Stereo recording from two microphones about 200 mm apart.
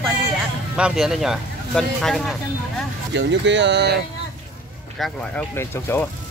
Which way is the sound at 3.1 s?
65° right (ahead or behind).